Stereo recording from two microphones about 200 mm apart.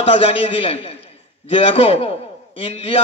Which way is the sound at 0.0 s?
30° left (ahead or behind).